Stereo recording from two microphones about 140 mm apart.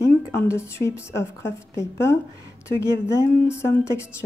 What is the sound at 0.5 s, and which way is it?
Speech, 20° left (ahead or behind).